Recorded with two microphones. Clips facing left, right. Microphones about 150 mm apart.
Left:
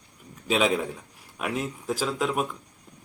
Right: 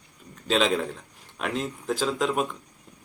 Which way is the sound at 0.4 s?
10° left (ahead or behind).